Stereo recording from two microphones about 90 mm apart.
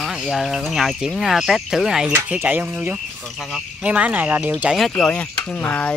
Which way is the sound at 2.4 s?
20° right (ahead or behind).